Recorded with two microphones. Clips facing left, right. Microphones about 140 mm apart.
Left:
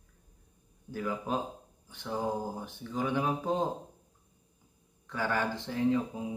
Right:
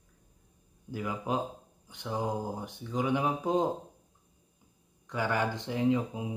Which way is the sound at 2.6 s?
15° right (ahead or behind).